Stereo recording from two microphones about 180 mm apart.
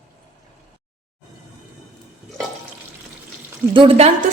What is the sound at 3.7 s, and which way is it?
Speech, 30° right (ahead or behind).